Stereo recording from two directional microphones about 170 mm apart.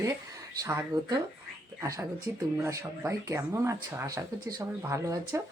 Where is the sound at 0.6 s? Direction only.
15° right (ahead or behind).